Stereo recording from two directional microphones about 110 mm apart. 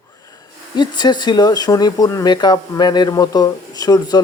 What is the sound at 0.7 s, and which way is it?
Speech, 40° left (ahead or behind).